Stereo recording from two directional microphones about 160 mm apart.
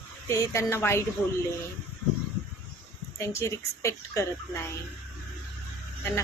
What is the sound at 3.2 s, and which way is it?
A woman's voice, 15° left (ahead or behind).